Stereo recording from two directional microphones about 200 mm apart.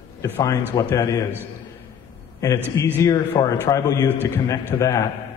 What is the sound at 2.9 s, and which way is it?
A man's voice, 15° left (ahead or behind).